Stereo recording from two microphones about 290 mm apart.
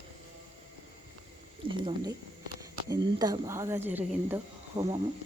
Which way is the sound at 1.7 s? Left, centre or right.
Centre.